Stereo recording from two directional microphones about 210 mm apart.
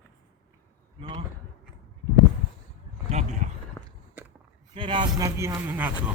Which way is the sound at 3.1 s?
35° right (ahead or behind).